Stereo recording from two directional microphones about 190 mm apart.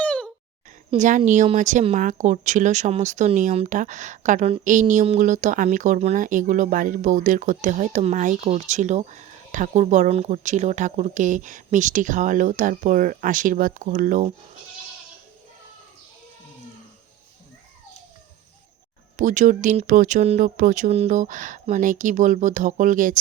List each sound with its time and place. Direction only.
0.0 s a sound: 5° left (ahead or behind)
0.9 s speech: 40° right (ahead or behind)
19.1 s speech: 40° right (ahead or behind)